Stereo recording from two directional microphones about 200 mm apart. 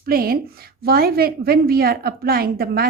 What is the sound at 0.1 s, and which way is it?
A woman's voice, 45° right (ahead or behind).